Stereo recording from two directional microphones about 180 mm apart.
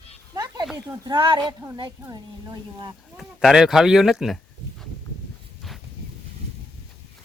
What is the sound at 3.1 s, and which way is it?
Speech, 5° right (ahead or behind).